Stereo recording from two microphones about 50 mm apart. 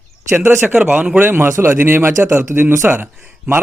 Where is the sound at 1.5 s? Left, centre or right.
Right.